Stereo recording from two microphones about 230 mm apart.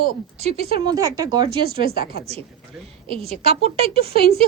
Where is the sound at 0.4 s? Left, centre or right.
Right.